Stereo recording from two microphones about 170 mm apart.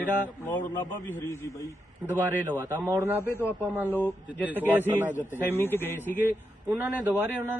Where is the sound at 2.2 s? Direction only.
10° right (ahead or behind).